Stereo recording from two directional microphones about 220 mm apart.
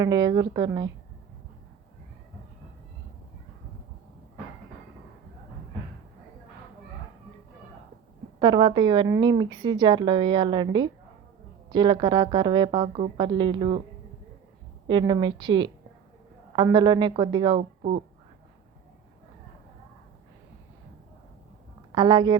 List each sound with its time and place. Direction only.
0.0 s a woman's voice: 15° right (ahead or behind)
8.4 s speech: 20° right (ahead or behind)
14.8 s speech: 20° right (ahead or behind)
17.6 s speech: 30° right (ahead or behind)
21.9 s speech: 20° right (ahead or behind)